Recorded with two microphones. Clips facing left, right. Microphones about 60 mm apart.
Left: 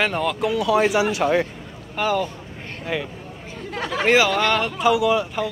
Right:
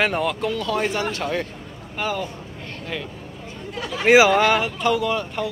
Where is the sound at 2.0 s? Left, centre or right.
Centre.